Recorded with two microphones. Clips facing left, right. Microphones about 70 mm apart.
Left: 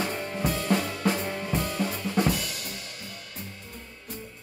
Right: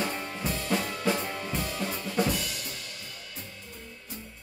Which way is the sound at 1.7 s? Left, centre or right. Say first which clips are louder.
Left 3 dB; centre.